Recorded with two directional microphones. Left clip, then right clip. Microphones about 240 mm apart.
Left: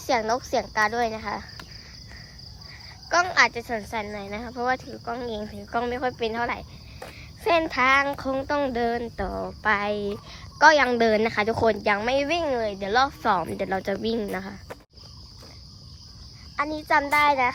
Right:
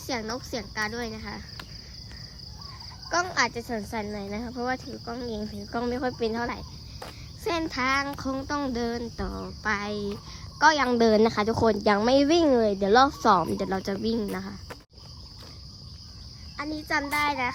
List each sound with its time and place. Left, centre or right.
0.1 s speech: centre
3.1 s speech: centre
3.6 s speech: centre
4.2 s speech: centre
5.7 s speech: centre
16.6 s speech: centre